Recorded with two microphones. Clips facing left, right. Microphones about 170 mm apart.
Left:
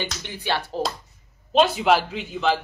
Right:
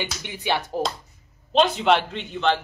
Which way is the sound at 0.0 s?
15° right (ahead or behind).